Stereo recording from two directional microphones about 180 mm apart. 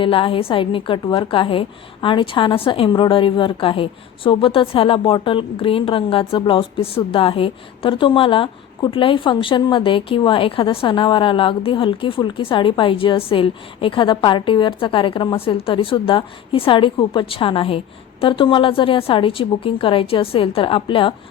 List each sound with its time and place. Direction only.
0.0 s a woman's voice: 30° left (ahead or behind)